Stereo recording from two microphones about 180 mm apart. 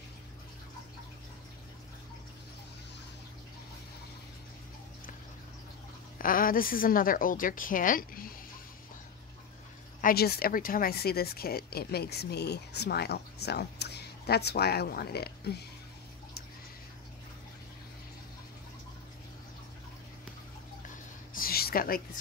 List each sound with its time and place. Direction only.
6.1 s a woman's voice: 50° left (ahead or behind)
10.0 s speech: 60° left (ahead or behind)
21.4 s a sound: 55° left (ahead or behind)